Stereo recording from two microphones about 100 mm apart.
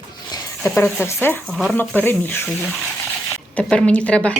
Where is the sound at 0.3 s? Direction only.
40° left (ahead or behind).